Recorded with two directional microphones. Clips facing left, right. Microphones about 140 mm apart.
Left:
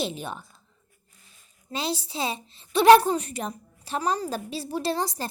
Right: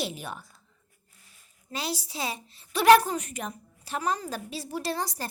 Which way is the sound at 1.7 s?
25° left (ahead or behind).